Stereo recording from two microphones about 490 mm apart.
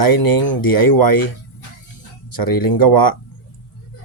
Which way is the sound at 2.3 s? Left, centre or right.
Left.